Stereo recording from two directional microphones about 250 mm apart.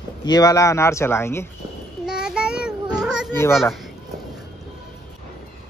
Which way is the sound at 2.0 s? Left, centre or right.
Centre.